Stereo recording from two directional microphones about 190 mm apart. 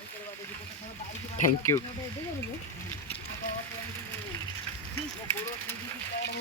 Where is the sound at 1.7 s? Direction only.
15° left (ahead or behind).